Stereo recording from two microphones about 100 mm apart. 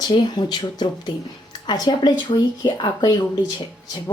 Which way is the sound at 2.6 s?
45° left (ahead or behind).